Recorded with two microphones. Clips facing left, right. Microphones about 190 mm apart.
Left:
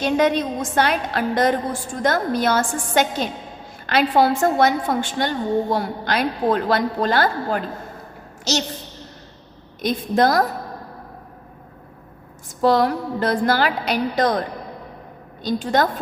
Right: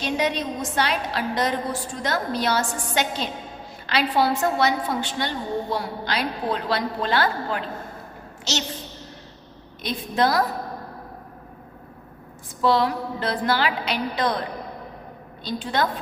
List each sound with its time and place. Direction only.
0.0 s a woman's voice: 50° left (ahead or behind)
9.8 s a woman's voice: 45° left (ahead or behind)
12.6 s a woman's voice: 45° left (ahead or behind)
15.4 s a woman's voice: 45° left (ahead or behind)